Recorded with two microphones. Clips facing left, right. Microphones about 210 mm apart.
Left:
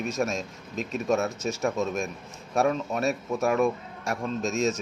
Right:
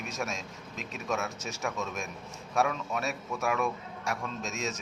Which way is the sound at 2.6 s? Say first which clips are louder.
Left 5 dB; 40° left (ahead or behind).